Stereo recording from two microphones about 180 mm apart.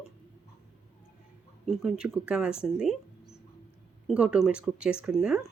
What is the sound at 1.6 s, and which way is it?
Speech, 5° right (ahead or behind).